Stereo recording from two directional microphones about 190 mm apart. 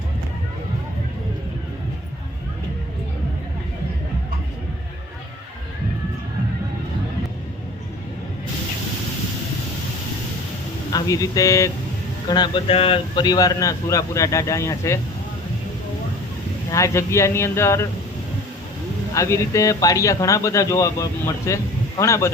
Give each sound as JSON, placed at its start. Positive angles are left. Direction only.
{"t": 10.9, "sound": "speech", "side_deg": 20}
{"t": 16.7, "sound": "speech", "side_deg": 15}
{"t": 19.1, "sound": "speech", "side_deg": 15}